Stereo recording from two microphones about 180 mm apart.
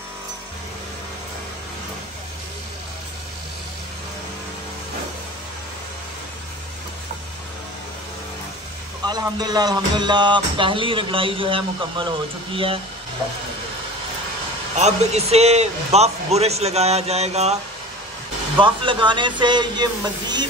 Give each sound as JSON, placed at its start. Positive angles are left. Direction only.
{"t": 9.0, "sound": "music", "side_deg": -20}
{"t": 14.8, "sound": "a man's voice", "side_deg": -40}
{"t": 18.6, "sound": "music", "side_deg": -25}